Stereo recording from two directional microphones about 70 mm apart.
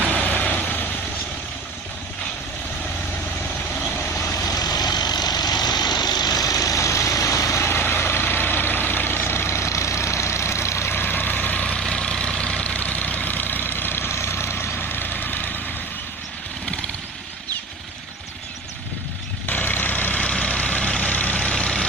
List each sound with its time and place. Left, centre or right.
0.1 s vehicle: left
4.2 s vehicle: left
4.4 s vehicle: left
11.8 s vehicle: centre; by 15.6 s left
19.5 s vehicle: left; by 21.8 s centre